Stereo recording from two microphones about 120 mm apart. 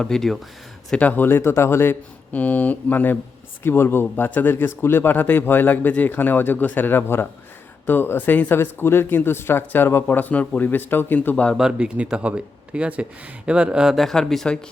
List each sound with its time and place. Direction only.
0.0 s speech: 5° left (ahead or behind)
11.5 s speech: 5° right (ahead or behind)